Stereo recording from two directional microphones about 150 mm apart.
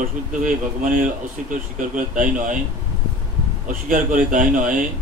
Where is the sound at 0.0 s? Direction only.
60° right (ahead or behind).